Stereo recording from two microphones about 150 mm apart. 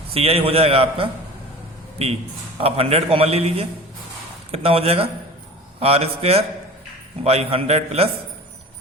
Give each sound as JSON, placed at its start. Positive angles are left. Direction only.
{"t": 0.1, "sound": "a man's voice", "side_deg": -40}
{"t": 2.6, "sound": "a man's voice", "side_deg": -40}